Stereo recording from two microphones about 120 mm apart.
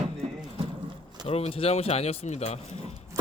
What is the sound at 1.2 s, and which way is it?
Speech, 55° left (ahead or behind).